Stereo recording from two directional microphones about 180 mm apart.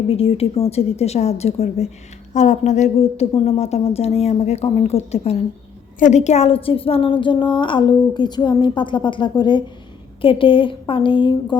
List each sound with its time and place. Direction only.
0.1 s a woman's voice: 30° left (ahead or behind)